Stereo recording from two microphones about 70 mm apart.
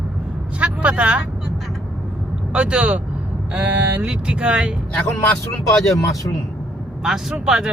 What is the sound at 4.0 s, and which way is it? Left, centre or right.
Speech, centre.